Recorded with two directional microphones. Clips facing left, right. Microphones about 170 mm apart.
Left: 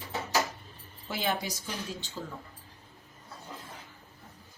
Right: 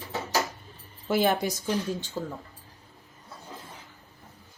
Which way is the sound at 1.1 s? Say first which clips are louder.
Right 8 dB; 50° right (ahead or behind).